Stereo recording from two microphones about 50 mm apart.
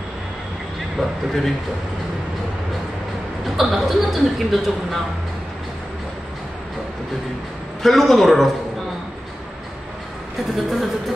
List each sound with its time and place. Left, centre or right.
0.9 s speech: centre
3.5 s speech: centre
7.8 s speech: centre
10.5 s speech: centre